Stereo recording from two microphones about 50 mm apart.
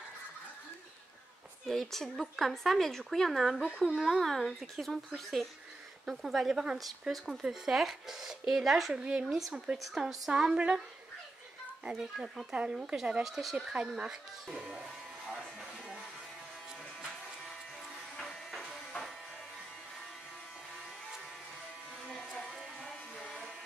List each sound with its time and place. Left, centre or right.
1.7 s speech: centre
3.6 s speech: right
3.9 s speech: centre
6.5 s a woman's voice: centre
6.8 s speech: centre
8.9 s a woman's voice: centre
9.2 s a woman's voice: centre
12.0 s speech: centre
12.5 s a woman's voice: centre
13.9 s speech: centre
18.1 s a sound: centre